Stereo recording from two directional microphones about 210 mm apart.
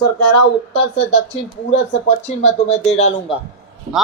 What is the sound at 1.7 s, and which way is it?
Speech, 30° left (ahead or behind).